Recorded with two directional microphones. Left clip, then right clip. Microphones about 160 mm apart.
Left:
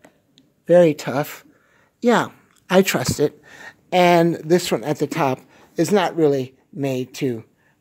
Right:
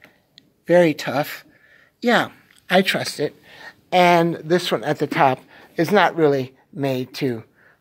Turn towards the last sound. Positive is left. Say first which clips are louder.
# even
turn(degrees=25)  # may be behind; listen again after turning